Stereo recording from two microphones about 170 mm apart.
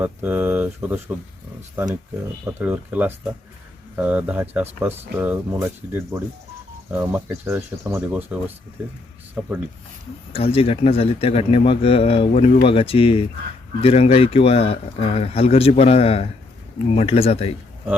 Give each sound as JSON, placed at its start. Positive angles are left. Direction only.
{"t": 0.0, "sound": "speech", "side_deg": -10}
{"t": 2.4, "sound": "speech", "side_deg": -10}
{"t": 10.3, "sound": "speech", "side_deg": 35}
{"t": 12.3, "sound": "speech", "side_deg": 50}
{"t": 12.6, "sound": "speech", "side_deg": 35}